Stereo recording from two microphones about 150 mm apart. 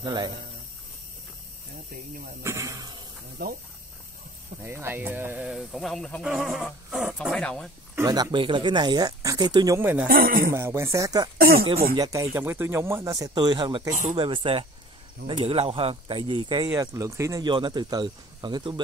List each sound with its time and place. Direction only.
0.0 s speech: 30° right (ahead or behind)
2.4 s speech: 20° right (ahead or behind)
3.4 s speech: 90° right
4.6 s speech: 15° right (ahead or behind); by 6.2 s 5° left (ahead or behind)
6.2 s a sound: 5° right (ahead or behind)
7.2 s a sound: 5° left (ahead or behind)
7.9 s speech: 20° right (ahead or behind)
9.8 s speech: 15° right (ahead or behind)
10.0 s speech: 70° right (ahead or behind)
10.5 s speech: 15° right (ahead or behind)
11.3 s speech: 85° right
12.0 s speech: 20° right (ahead or behind)
16.7 s speech: 20° right (ahead or behind)